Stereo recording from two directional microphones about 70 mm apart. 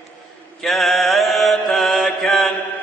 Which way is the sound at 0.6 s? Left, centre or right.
Centre.